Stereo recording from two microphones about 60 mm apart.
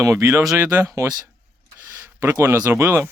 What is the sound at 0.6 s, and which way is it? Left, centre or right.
Speech, right.